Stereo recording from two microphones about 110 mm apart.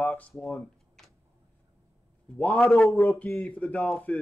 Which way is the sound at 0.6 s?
5° left (ahead or behind).